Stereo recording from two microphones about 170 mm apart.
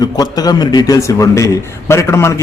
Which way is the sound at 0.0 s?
20° left (ahead or behind).